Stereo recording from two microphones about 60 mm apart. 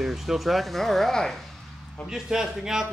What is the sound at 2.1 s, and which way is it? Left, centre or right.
Speech, centre.